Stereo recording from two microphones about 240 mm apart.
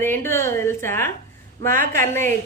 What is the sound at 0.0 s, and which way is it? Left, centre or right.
A woman's voice, centre.